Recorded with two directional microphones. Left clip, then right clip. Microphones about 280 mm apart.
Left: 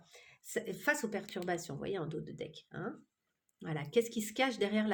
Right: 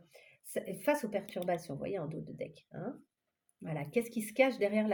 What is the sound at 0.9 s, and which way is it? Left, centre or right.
Speech, left.